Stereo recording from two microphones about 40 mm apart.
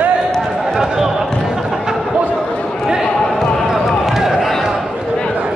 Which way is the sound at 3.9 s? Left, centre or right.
Centre.